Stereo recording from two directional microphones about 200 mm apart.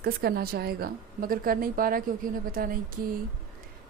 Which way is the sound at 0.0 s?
50° right (ahead or behind).